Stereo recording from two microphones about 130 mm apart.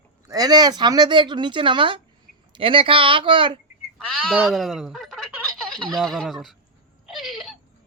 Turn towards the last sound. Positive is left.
turn(degrees=0)  # may be behind; listen again after turning